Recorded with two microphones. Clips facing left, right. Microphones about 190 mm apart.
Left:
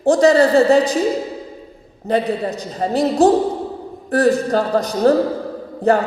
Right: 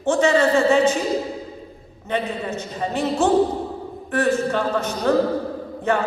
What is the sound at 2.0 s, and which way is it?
A man's voice, 35° left (ahead or behind).